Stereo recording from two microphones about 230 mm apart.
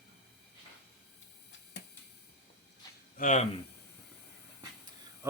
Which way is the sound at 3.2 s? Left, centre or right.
Left.